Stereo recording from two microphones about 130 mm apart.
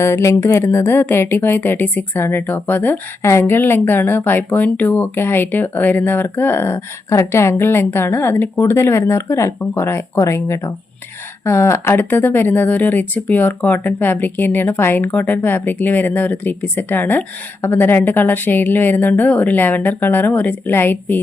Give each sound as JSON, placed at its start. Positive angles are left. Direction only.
{"t": 0.0, "sound": "speech", "side_deg": 20}